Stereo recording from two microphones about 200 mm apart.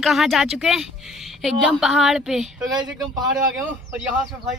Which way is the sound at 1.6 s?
Centre (ahead or behind).